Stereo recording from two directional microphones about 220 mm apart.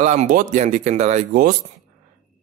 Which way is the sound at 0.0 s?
30° right (ahead or behind).